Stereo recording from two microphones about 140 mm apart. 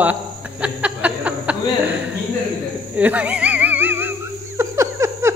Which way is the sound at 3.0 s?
10° right (ahead or behind).